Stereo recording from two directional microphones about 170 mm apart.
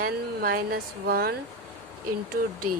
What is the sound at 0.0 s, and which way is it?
Speech, 60° right (ahead or behind).